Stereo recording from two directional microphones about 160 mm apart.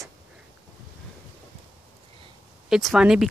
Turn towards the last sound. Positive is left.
turn(degrees=-5)  # may be behind; listen again after turning